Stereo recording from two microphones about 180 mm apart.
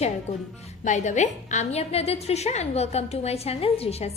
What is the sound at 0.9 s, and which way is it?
A woman's voice, 40° left (ahead or behind).